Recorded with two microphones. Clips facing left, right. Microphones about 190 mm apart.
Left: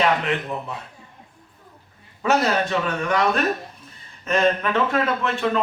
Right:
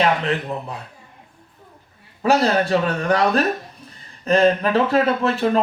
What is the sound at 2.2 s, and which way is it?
A man's voice, 35° right (ahead or behind).